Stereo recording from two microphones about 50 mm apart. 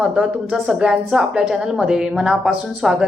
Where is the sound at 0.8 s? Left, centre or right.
Centre.